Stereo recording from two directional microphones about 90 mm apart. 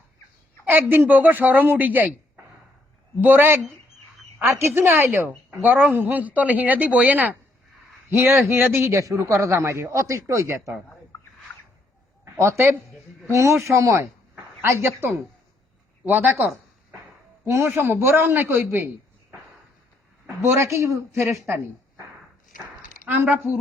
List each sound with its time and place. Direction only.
0.6 s a man's voice: 25° right (ahead or behind)
8.1 s a man's voice: 25° right (ahead or behind)
11.1 s a sound: 30° left (ahead or behind)
12.2 s a man's voice: 30° right (ahead or behind)
20.2 s a man's voice: 25° right (ahead or behind)
23.2 s a man's voice: 20° right (ahead or behind)